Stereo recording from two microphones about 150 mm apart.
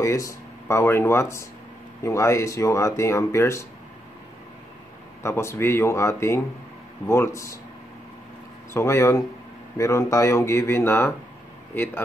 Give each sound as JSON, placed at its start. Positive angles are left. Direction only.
{"t": 0.0, "sound": "speech", "side_deg": 20}
{"t": 5.2, "sound": "speech", "side_deg": 15}
{"t": 8.7, "sound": "speech", "side_deg": 20}